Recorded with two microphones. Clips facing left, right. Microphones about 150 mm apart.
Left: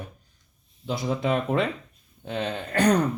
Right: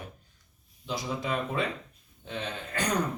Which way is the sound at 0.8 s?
55° left (ahead or behind).